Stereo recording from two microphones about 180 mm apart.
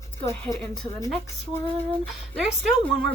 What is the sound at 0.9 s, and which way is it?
Speech, 20° left (ahead or behind).